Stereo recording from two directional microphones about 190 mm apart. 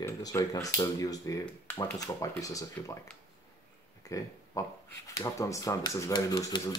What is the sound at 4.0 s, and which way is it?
Speech, 15° left (ahead or behind).